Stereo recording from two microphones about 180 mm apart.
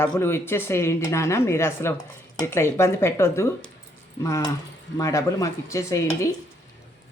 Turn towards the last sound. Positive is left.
turn(degrees=15)  # may be behind; listen again after turning